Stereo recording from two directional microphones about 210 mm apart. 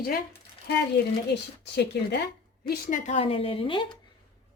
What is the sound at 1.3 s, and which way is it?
Speech, 55° left (ahead or behind).